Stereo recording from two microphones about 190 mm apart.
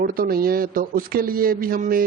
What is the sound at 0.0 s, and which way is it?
Speech, 50° right (ahead or behind).